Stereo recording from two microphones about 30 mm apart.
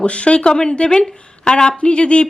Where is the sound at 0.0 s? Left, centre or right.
Left.